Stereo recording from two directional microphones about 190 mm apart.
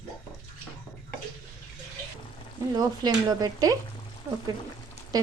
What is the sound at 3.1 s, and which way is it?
Speech, 20° right (ahead or behind).